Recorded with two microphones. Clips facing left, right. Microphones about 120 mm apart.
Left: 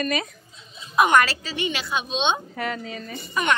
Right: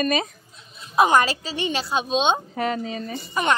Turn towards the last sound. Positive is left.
turn(degrees=-25)  # may be behind; listen again after turning